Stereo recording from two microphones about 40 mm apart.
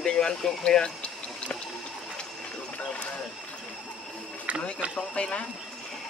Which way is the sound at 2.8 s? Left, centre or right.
Left.